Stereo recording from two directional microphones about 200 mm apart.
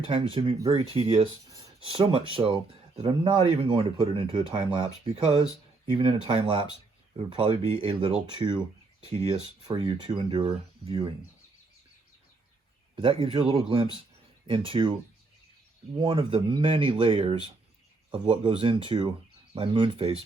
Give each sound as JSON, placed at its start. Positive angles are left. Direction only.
{"t": 0.0, "sound": "speech", "side_deg": -25}
{"t": 13.0, "sound": "speech", "side_deg": -25}
{"t": 16.0, "sound": "speech", "side_deg": -25}